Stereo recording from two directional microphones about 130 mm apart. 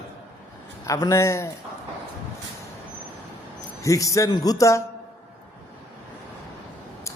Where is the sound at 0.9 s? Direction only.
25° left (ahead or behind).